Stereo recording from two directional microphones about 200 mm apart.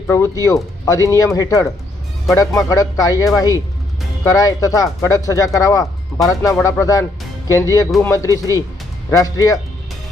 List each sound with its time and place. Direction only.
0.1 s speech: 15° left (ahead or behind)